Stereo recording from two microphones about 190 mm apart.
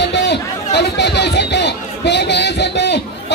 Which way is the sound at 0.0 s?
65° left (ahead or behind).